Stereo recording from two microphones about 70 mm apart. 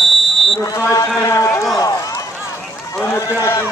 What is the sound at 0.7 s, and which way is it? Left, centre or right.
Speech, left.